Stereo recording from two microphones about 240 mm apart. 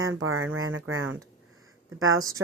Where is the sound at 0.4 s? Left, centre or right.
Right.